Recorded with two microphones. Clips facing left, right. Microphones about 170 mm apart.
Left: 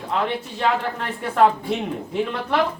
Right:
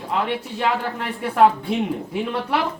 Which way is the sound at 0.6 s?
5° right (ahead or behind).